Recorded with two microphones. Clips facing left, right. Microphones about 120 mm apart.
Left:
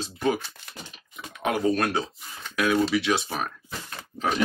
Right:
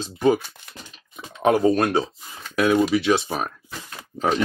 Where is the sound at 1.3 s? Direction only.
30° right (ahead or behind).